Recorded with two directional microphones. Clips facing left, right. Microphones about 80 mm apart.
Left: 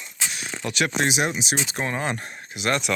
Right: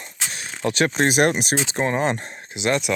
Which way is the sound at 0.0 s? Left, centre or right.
Right.